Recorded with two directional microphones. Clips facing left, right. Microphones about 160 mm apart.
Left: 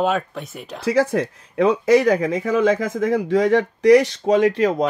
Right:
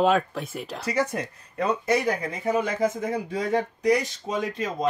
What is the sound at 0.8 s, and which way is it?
Speech, 90° left.